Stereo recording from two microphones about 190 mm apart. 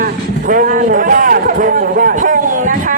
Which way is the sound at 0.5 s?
45° right (ahead or behind).